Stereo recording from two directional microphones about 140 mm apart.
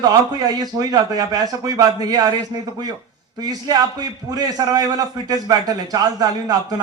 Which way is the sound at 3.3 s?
30° right (ahead or behind).